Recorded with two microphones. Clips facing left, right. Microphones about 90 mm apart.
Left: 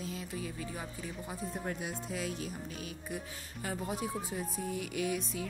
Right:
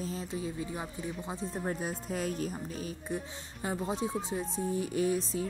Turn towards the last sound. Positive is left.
turn(degrees=-35)  # may be behind; listen again after turning